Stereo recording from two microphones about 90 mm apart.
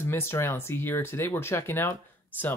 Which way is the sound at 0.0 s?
25° left (ahead or behind).